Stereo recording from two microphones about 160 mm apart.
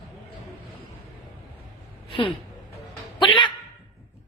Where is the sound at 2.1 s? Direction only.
30° left (ahead or behind).